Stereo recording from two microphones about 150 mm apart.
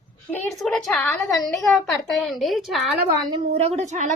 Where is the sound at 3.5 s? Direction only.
45° right (ahead or behind).